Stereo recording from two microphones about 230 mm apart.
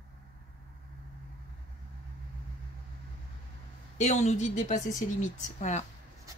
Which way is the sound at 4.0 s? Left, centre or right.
Left.